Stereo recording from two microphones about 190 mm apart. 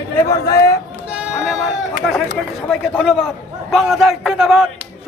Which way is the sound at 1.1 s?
5° right (ahead or behind).